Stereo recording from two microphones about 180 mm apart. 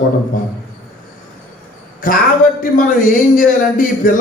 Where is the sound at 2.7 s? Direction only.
50° left (ahead or behind).